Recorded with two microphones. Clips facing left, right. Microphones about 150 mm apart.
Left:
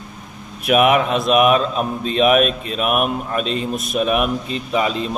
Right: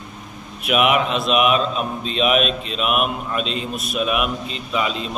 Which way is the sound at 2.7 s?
45° left (ahead or behind).